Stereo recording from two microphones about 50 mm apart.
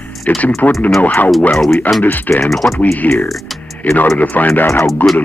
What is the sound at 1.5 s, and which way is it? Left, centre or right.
Speech, centre.